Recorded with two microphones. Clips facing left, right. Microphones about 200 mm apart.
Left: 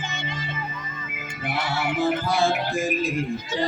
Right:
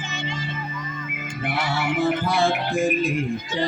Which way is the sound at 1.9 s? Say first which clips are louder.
Right 1 dB; 55° right (ahead or behind).